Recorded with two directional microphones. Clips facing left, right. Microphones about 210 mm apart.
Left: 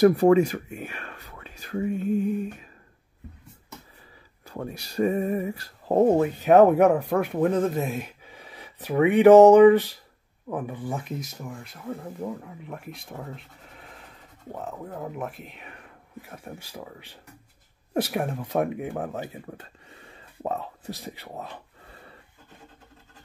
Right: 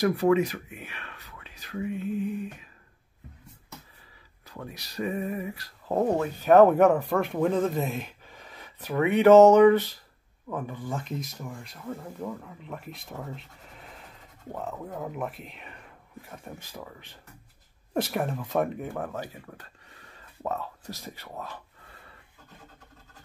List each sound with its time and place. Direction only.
0.1 s speech: 50° left (ahead or behind)
4.5 s speech: 45° left (ahead or behind)
5.0 s a sound: 40° left (ahead or behind)
5.9 s speech: 25° left (ahead or behind)
6.8 s speech: centre (ahead or behind)
18.1 s speech: 5° left (ahead or behind); by 22.1 s 25° left (ahead or behind)